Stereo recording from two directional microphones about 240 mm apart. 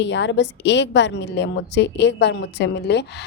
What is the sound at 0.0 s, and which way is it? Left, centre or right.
A woman's voice, left.